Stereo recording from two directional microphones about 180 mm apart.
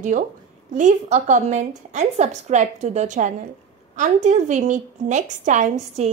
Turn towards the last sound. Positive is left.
turn(degrees=-40)  # may be behind; listen again after turning